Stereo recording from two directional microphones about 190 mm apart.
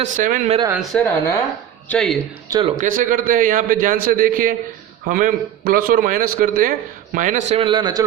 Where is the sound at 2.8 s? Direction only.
45° right (ahead or behind).